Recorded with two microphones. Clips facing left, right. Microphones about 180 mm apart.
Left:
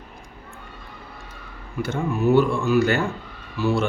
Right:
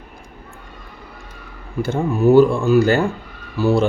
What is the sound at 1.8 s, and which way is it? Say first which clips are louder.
Speech: right 5 dB; 30° right (ahead or behind).